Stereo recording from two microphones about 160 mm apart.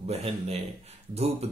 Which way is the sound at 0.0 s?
40° right (ahead or behind).